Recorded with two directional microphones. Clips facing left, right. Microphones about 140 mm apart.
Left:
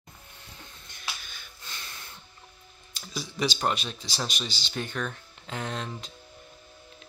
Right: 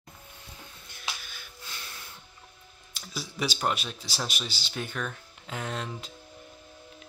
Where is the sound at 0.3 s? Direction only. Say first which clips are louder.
Left 1 dB; 10° right (ahead or behind).